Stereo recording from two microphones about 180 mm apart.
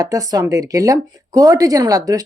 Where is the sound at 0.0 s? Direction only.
20° right (ahead or behind).